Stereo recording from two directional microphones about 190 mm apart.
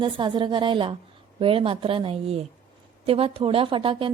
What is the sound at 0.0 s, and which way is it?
A woman's voice, 25° right (ahead or behind).